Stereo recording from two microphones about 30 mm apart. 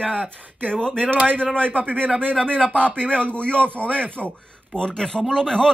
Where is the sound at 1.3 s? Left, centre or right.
Left.